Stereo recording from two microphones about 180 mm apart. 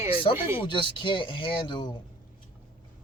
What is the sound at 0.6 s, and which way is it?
Speech, 25° left (ahead or behind).